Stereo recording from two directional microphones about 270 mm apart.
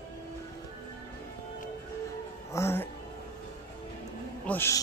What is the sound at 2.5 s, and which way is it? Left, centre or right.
Music, centre.